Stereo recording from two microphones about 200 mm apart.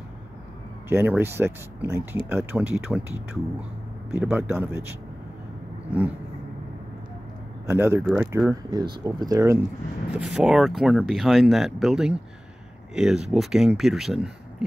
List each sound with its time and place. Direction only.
0.8 s speech: 10° right (ahead or behind)
4.2 s speech: 10° right (ahead or behind)
7.6 s speech: 10° right (ahead or behind)
10.1 s speech: 5° right (ahead or behind)